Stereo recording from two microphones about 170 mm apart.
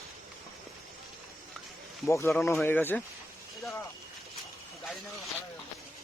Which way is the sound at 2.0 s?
15° left (ahead or behind).